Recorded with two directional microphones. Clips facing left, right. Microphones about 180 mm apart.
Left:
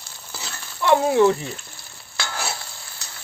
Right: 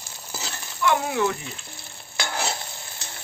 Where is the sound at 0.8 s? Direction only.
30° left (ahead or behind).